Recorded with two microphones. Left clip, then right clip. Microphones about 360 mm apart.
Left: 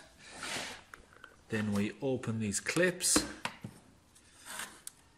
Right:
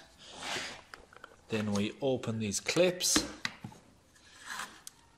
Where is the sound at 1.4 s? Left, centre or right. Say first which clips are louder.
Right 2 dB; centre.